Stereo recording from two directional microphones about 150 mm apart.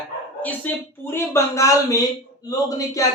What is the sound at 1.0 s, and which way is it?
A man's voice, 15° left (ahead or behind).